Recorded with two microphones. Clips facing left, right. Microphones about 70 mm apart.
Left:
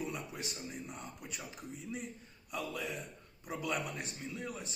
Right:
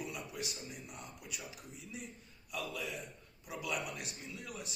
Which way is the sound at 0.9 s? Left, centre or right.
Left.